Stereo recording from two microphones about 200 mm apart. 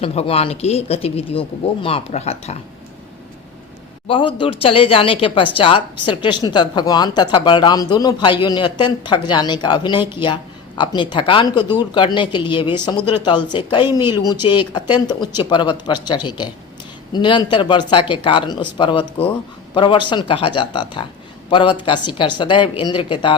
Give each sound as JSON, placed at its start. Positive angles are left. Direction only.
{"t": 0.0, "sound": "speech", "side_deg": 30}
{"t": 4.0, "sound": "a man's voice", "side_deg": 25}